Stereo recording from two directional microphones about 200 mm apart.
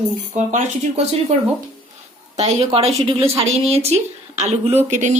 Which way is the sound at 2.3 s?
35° right (ahead or behind).